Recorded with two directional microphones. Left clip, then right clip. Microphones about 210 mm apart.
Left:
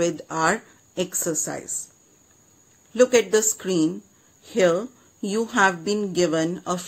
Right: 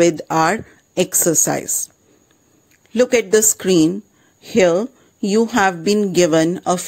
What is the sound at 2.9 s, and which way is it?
Speech, 35° right (ahead or behind).